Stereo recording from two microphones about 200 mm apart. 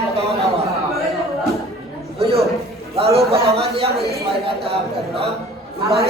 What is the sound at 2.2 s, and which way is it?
Speech, 30° right (ahead or behind).